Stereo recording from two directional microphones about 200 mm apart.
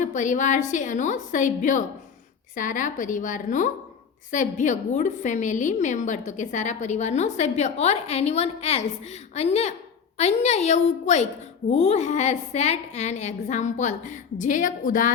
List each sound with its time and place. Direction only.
0.0 s a woman's voice: 40° left (ahead or behind)